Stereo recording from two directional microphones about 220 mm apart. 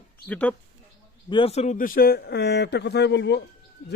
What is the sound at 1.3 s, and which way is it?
A man's voice, 25° left (ahead or behind).